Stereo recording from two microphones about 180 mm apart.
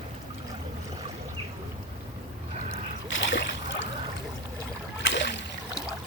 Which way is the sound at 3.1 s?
90° left.